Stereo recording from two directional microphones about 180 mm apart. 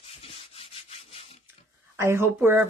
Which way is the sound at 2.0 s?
15° right (ahead or behind).